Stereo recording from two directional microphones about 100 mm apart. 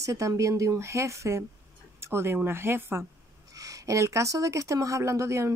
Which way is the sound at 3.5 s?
35° right (ahead or behind).